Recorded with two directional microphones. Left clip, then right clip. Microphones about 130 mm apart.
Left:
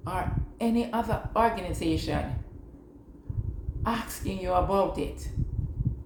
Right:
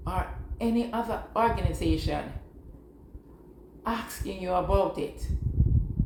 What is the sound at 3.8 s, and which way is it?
A woman's voice, 25° left (ahead or behind).